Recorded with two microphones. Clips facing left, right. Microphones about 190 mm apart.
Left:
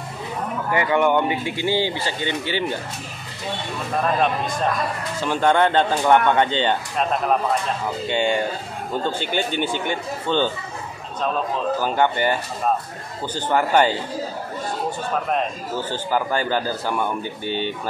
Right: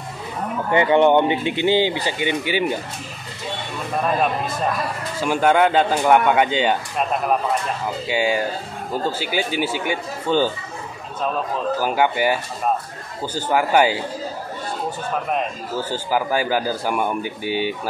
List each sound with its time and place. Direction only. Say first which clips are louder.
0.7 s speech: right 4 dB; 25° right (ahead or behind)
3.9 s a man's voice: even; 5° right (ahead or behind)
11.8 s a man's voice: right 2 dB; 10° right (ahead or behind)
15.2 s a man's voice: even; 5° right (ahead or behind)